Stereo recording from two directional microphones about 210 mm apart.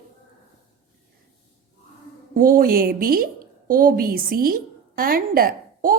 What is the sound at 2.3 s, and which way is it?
Speech, 40° right (ahead or behind).